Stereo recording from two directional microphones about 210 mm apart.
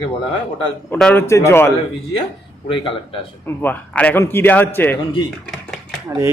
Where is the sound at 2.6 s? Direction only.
25° left (ahead or behind).